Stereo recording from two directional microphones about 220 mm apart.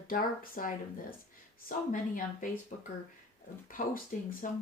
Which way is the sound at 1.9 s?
35° left (ahead or behind).